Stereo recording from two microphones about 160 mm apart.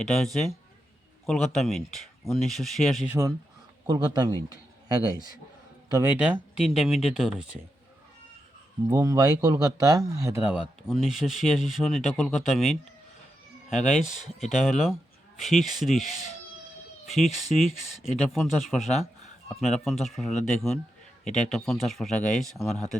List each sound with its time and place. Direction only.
0.0 s speech: centre (ahead or behind)
1.3 s speech: centre (ahead or behind)
3.1 s speech: 20° right (ahead or behind)
5.9 s speech: 20° right (ahead or behind)
6.7 s speech: 5° right (ahead or behind)
8.9 s speech: 25° right (ahead or behind)
10.5 s speech: centre (ahead or behind)
17.2 s speech: centre (ahead or behind)
18.8 s speech: 45° left (ahead or behind)
19.5 s speech: centre (ahead or behind)